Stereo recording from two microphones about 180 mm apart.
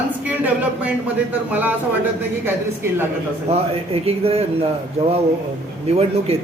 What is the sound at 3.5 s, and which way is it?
Speech, 30° right (ahead or behind).